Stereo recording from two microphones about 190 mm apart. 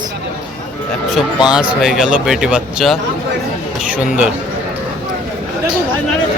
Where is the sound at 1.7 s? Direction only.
Centre (ahead or behind).